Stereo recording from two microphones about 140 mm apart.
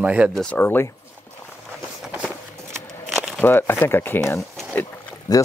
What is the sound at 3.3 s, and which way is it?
Speech, 15° left (ahead or behind).